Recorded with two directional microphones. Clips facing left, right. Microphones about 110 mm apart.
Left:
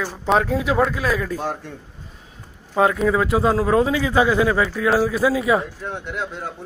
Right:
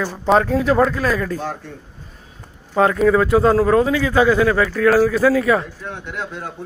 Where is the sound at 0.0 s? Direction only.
5° left (ahead or behind).